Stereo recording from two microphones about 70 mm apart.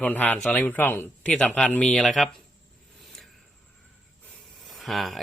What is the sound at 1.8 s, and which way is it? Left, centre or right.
Speech, centre.